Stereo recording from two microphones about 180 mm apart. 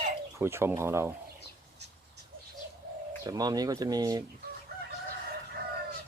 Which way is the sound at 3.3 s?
20° right (ahead or behind).